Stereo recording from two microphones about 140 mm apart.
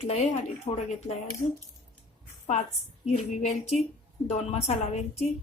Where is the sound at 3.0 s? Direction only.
50° left (ahead or behind).